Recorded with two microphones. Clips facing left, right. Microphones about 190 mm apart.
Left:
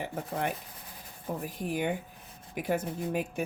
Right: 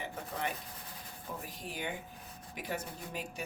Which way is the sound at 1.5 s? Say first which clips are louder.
Left 10 dB; 55° left (ahead or behind).